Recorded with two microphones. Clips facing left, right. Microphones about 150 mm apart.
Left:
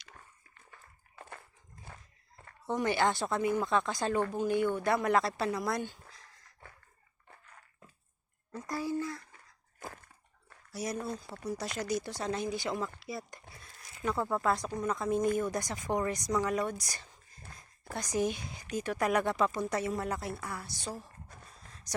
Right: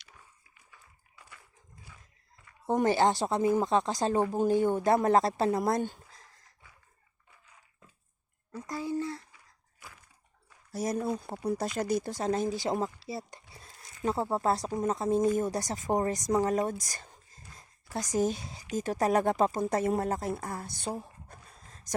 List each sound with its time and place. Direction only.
0.7 s dog: 50° left (ahead or behind)
2.6 s speech: 40° right (ahead or behind)
7.3 s dog: 60° left (ahead or behind)
8.6 s speech: 20° right (ahead or behind)
9.8 s a sound: 50° left (ahead or behind)
10.7 s speech: 45° right (ahead or behind)